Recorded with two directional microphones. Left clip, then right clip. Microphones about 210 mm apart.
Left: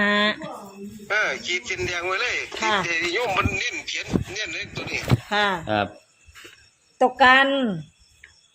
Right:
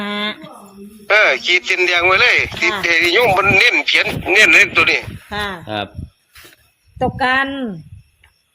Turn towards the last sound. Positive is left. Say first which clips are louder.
# left 1 dB
turn(degrees=20)  # may be behind; listen again after turning